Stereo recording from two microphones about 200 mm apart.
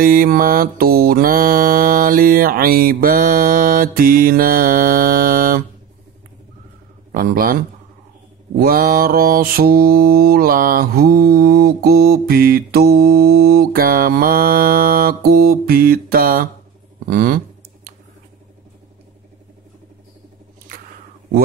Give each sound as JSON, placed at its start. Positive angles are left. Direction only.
{"t": 0.0, "sound": "mantra", "side_deg": -45}
{"t": 7.1, "sound": "a man's voice", "side_deg": -45}
{"t": 8.5, "sound": "mantra", "side_deg": -45}